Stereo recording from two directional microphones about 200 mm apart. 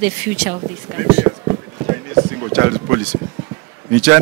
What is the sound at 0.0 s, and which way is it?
Speech, 10° right (ahead or behind).